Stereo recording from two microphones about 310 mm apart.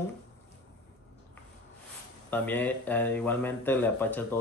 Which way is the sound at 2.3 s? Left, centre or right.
Centre.